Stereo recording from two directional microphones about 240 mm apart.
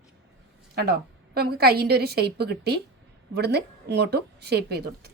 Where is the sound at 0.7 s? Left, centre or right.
Right.